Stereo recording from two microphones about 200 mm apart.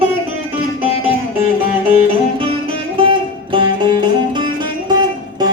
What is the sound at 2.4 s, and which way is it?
Music, 25° right (ahead or behind).